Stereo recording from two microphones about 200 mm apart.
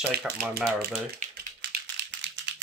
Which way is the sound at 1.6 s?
65° right (ahead or behind).